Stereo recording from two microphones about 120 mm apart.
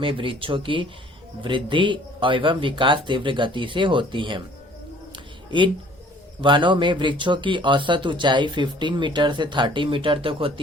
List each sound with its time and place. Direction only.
0.0 s speech: 45° right (ahead or behind)
5.1 s a sound: 40° right (ahead or behind)
6.4 s speech: 40° right (ahead or behind)